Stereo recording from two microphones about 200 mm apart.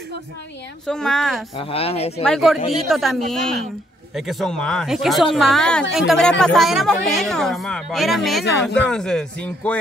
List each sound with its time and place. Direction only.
0.8 s speech: 5° left (ahead or behind)
1.6 s speech: 30° left (ahead or behind)
2.2 s speech: centre (ahead or behind)